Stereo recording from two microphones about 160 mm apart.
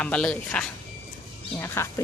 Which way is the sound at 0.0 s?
5° left (ahead or behind).